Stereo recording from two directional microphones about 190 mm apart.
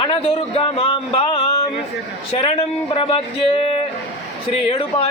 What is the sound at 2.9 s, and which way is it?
A man's voice, 30° left (ahead or behind).